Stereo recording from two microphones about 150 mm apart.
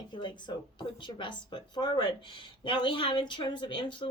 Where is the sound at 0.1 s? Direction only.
30° left (ahead or behind).